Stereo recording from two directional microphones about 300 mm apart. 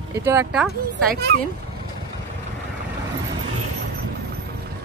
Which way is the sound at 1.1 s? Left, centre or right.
Right.